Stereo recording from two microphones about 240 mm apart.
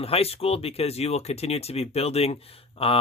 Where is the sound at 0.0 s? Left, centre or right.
Left.